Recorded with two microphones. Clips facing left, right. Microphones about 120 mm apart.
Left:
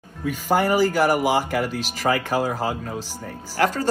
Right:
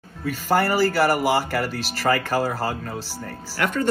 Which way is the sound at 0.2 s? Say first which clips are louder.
Even; 15° left (ahead or behind).